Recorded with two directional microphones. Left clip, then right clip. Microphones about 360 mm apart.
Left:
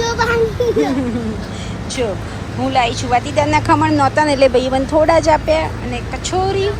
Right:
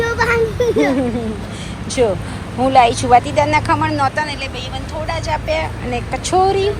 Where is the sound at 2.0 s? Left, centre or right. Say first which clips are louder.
Right 5 dB; centre.